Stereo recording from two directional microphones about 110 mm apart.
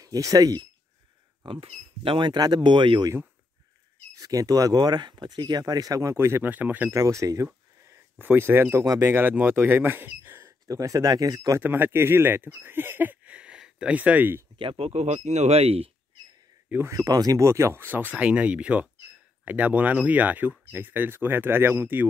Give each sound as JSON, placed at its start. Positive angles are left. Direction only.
{"t": 0.0, "sound": "speech", "side_deg": -35}
{"t": 1.4, "sound": "speech", "side_deg": -55}
{"t": 4.1, "sound": "speech", "side_deg": -30}
{"t": 6.9, "sound": "speech", "side_deg": -30}
{"t": 7.8, "sound": "speech", "side_deg": -20}
{"t": 10.7, "sound": "speech", "side_deg": -30}
{"t": 11.6, "sound": "speech", "side_deg": -20}
{"t": 14.6, "sound": "speech", "side_deg": -60}
{"t": 16.6, "sound": "speech", "side_deg": -15}
{"t": 16.9, "sound": "speech", "side_deg": -35}